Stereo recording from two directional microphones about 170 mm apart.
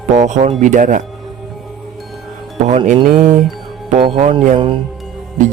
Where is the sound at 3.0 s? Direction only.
50° right (ahead or behind).